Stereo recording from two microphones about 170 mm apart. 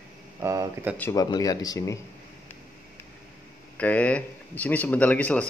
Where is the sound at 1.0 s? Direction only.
15° left (ahead or behind).